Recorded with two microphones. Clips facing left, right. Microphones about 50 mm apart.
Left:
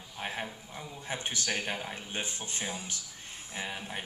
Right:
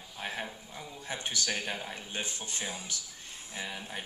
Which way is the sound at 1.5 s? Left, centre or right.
Centre.